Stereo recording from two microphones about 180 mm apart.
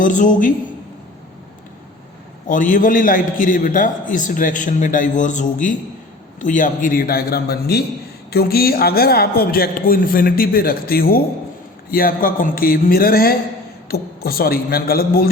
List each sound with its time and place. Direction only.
0.0 s a man's voice: 45° left (ahead or behind)
2.5 s a man's voice: 50° left (ahead or behind)